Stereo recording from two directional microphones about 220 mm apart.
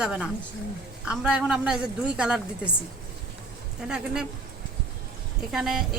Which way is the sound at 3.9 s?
5° right (ahead or behind).